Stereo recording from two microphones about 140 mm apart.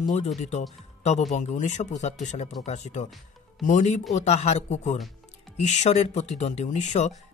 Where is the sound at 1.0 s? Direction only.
55° left (ahead or behind).